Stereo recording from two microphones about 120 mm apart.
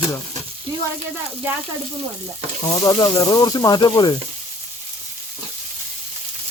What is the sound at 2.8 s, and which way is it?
Speech, 35° left (ahead or behind).